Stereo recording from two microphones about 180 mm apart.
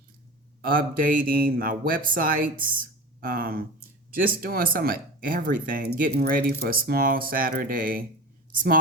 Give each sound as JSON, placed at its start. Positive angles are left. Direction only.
{"t": 0.6, "sound": "speech", "side_deg": -50}